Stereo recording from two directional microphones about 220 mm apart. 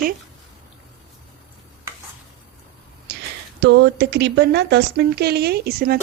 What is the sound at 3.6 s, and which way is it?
Speech, 50° right (ahead or behind).